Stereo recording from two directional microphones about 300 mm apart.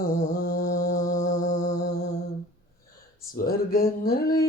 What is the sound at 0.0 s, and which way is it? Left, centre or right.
Mantra, left.